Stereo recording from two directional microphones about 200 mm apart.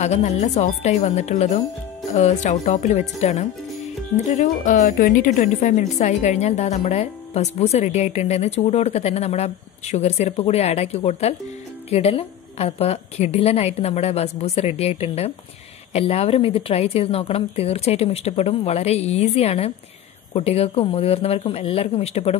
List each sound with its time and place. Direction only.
0.0 s speech: 35° left (ahead or behind)